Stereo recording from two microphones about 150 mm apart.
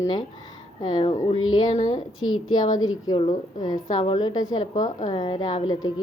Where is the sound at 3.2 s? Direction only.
25° left (ahead or behind).